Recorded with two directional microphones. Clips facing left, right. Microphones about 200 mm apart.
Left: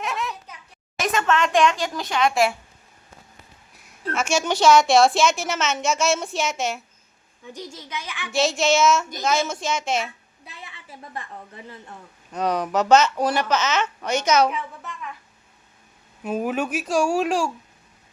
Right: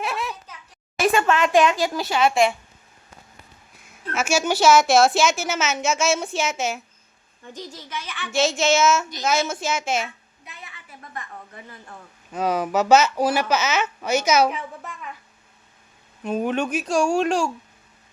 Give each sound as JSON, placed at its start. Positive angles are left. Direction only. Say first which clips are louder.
{"t": 0.0, "sound": "a sound", "louder": "right 1 dB", "side_deg": -10}
{"t": 0.9, "sound": "speech", "louder": "right 3 dB", "side_deg": -10}
{"t": 3.8, "sound": "a woman's voice", "louder": "left 1 dB", "side_deg": -5}
{"t": 7.5, "sound": "a child's voice", "louder": "even", "side_deg": 15}
{"t": 8.3, "sound": "a woman's voice", "louder": "even", "side_deg": 0}
{"t": 10.4, "sound": "a woman's voice", "louder": "left 1 dB", "side_deg": 30}
{"t": 12.3, "sound": "a woman's voice", "louder": "right 1 dB", "side_deg": -5}
{"t": 16.2, "sound": "a woman's voice", "louder": "right 1 dB", "side_deg": 5}